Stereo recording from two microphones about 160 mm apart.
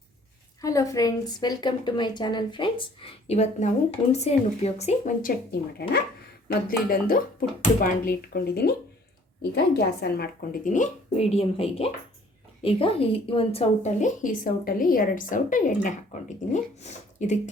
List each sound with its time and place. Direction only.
0.6 s a woman's voice: 20° left (ahead or behind); by 5.1 s 45° left (ahead or behind)
6.5 s a woman's voice: 65° left (ahead or behind); by 17.5 s 45° left (ahead or behind)